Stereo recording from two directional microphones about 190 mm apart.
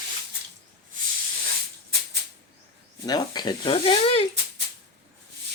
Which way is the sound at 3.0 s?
20° left (ahead or behind).